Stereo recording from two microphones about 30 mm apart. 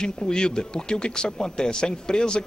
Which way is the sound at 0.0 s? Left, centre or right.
Left.